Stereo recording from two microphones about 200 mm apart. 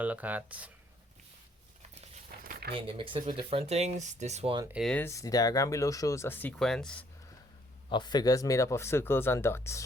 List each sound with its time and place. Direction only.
0.0 s speech: 10° right (ahead or behind)
2.0 s a sound: 40° right (ahead or behind)
2.7 s speech: 25° right (ahead or behind)
4.7 s speech: centre (ahead or behind)
5.0 s speech: 15° left (ahead or behind)
7.9 s speech: 20° left (ahead or behind)